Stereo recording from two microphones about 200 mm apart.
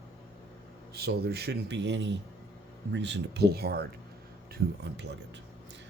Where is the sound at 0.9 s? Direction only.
50° right (ahead or behind).